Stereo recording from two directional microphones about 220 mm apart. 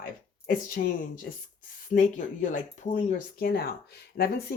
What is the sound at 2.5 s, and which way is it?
Speech, 35° left (ahead or behind).